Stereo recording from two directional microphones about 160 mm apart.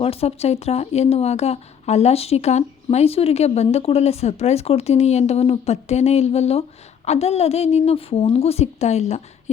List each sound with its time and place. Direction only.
0.0 s speech: 40° left (ahead or behind)